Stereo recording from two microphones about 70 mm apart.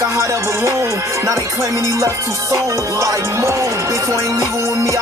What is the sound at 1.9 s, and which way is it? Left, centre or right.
Music, right.